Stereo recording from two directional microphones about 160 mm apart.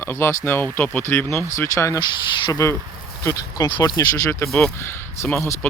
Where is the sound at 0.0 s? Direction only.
15° left (ahead or behind).